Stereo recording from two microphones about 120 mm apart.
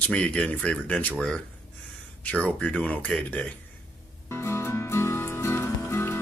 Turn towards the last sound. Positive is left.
turn(degrees=20)  # may be behind; listen again after turning